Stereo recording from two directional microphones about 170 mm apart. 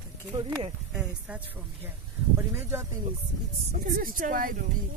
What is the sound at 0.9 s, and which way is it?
Speech, 5° right (ahead or behind).